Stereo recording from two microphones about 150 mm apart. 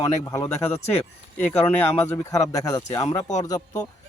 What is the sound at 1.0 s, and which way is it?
Speech, 5° left (ahead or behind).